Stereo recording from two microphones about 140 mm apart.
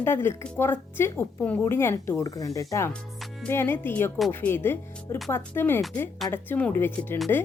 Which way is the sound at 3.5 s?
15° left (ahead or behind).